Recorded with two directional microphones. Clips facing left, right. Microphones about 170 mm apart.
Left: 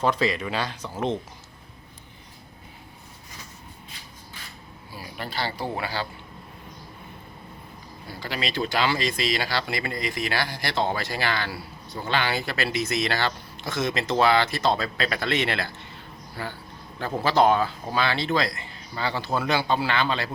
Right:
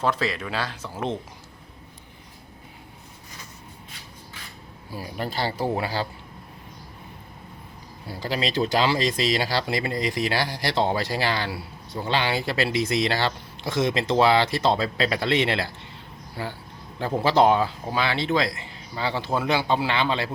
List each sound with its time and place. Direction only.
0.0 s speech: 5° right (ahead or behind)
4.9 s speech: 40° right (ahead or behind)
8.2 s speech: 35° right (ahead or behind)